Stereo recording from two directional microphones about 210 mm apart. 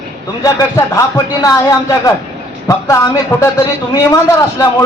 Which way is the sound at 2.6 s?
15° left (ahead or behind).